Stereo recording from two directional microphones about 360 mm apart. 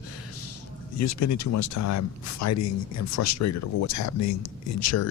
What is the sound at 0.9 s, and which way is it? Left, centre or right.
Speech, left.